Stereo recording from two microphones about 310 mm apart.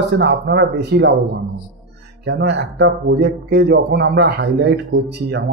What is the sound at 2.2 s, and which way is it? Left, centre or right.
Speech, right.